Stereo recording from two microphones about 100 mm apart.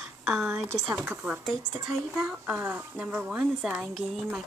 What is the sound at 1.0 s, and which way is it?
Speech, 15° right (ahead or behind).